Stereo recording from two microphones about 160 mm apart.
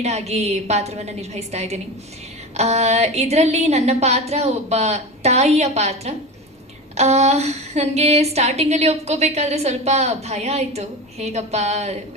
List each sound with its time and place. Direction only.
0.0 s a woman's voice: 40° right (ahead or behind)